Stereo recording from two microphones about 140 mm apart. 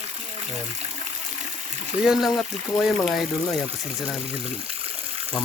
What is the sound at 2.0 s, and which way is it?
Speech, centre (ahead or behind).